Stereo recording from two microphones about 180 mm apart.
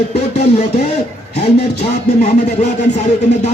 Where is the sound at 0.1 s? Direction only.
35° left (ahead or behind).